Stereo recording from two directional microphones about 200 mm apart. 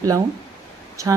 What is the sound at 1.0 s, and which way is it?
Speech, 15° right (ahead or behind).